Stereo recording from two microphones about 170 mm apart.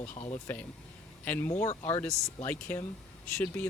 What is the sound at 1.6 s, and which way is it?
Speech, 40° left (ahead or behind).